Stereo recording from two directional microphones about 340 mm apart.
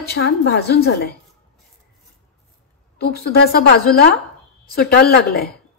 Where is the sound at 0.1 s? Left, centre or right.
Left.